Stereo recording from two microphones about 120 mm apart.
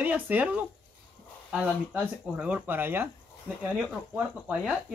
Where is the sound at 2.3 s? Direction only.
10° right (ahead or behind).